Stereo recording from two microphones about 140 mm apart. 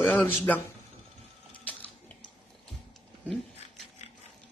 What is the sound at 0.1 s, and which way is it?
Speech, 10° left (ahead or behind).